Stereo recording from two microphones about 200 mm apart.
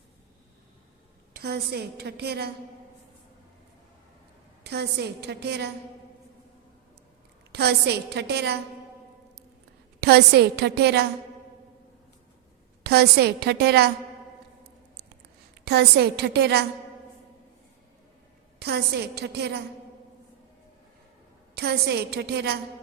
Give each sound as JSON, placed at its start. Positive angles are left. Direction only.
{"t": 1.4, "sound": "a woman's voice", "side_deg": -55}
{"t": 4.6, "sound": "a woman's voice", "side_deg": -55}
{"t": 7.5, "sound": "a woman's voice", "side_deg": -55}
{"t": 10.0, "sound": "a woman's voice", "side_deg": -55}
{"t": 12.8, "sound": "a woman's voice", "side_deg": -55}
{"t": 15.6, "sound": "a woman's voice", "side_deg": -55}
{"t": 18.6, "sound": "a woman's voice", "side_deg": -55}
{"t": 21.5, "sound": "a woman's voice", "side_deg": -55}